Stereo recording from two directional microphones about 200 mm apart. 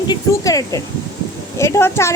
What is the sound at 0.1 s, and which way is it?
A woman's voice, 15° left (ahead or behind).